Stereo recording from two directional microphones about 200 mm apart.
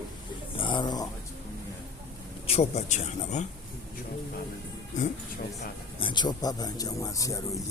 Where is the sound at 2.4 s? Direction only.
30° left (ahead or behind).